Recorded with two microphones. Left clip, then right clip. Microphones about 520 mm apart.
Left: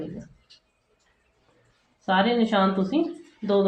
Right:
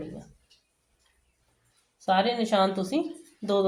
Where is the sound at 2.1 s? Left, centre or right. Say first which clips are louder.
Left 2 dB; right.